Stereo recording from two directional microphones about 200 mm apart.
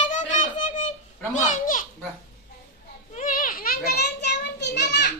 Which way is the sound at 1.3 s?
40° left (ahead or behind).